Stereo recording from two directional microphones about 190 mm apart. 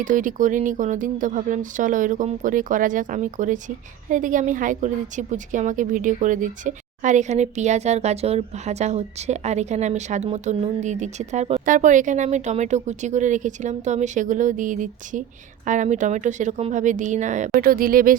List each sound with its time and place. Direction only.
0.0 s a woman's voice: 45° right (ahead or behind)